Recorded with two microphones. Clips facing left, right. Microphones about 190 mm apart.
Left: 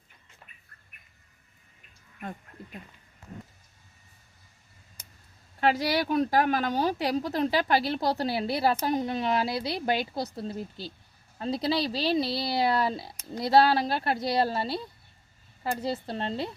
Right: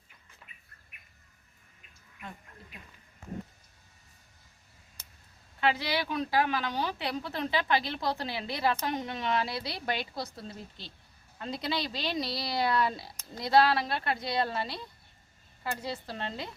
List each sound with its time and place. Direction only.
5.5 s speech: 40° left (ahead or behind)